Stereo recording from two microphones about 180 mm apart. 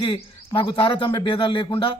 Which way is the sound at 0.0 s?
30° left (ahead or behind).